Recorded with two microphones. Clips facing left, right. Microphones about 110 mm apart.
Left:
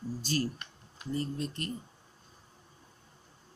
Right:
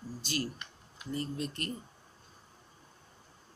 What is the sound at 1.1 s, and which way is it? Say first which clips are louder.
Speech: left 1 dB; 25° left (ahead or behind).